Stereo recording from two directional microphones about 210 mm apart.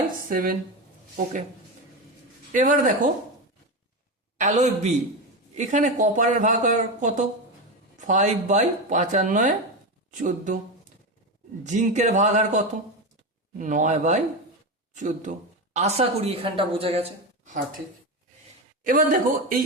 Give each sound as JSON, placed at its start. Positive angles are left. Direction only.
{"t": 0.3, "sound": "speech", "side_deg": -40}
{"t": 2.5, "sound": "speech", "side_deg": -40}
{"t": 4.4, "sound": "speech", "side_deg": -35}
{"t": 11.6, "sound": "a woman's voice", "side_deg": -35}
{"t": 18.8, "sound": "speech", "side_deg": -40}